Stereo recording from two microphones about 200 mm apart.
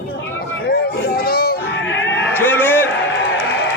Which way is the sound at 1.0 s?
50° left (ahead or behind).